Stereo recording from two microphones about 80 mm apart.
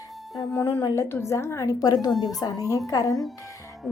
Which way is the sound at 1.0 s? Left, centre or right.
Left.